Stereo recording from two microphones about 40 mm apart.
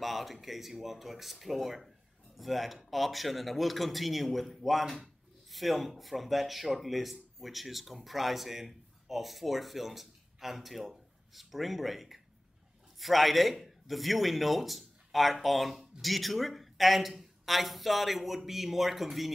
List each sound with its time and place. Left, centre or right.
0.0 s speech: centre